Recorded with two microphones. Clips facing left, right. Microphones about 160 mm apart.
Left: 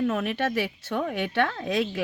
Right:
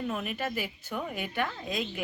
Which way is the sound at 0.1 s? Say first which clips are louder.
Left 6 dB; 75° left (ahead or behind).